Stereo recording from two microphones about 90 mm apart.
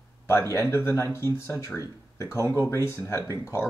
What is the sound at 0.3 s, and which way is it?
Speech, 30° left (ahead or behind).